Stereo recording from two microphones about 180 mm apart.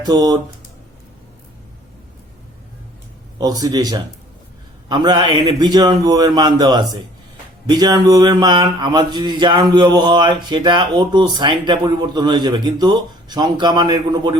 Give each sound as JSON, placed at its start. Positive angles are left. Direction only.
{"t": 0.0, "sound": "speech", "side_deg": -20}
{"t": 3.3, "sound": "speech", "side_deg": -20}